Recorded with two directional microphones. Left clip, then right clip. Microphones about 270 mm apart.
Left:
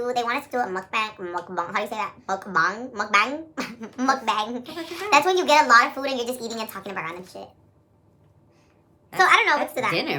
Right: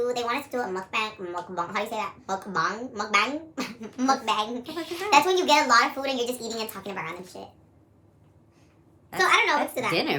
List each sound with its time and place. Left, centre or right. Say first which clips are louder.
0.0 s speech: left 2 dB; centre
9.1 s speech: left 4 dB; centre
9.9 s a woman's voice: even; centre